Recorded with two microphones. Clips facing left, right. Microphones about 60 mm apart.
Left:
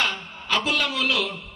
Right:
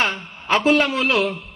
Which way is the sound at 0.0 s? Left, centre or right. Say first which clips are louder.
Right 4 dB; right.